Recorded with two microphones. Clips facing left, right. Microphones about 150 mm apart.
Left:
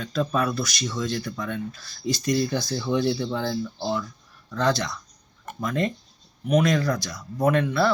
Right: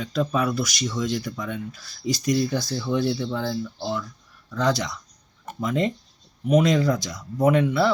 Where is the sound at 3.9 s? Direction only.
Centre (ahead or behind).